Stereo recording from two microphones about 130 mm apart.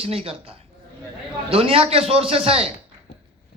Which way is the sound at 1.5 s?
50° right (ahead or behind).